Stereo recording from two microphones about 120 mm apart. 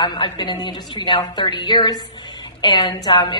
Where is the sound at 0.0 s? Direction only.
40° left (ahead or behind).